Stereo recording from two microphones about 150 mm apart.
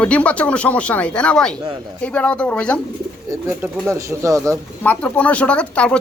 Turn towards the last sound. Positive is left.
turn(degrees=5)  # may be behind; listen again after turning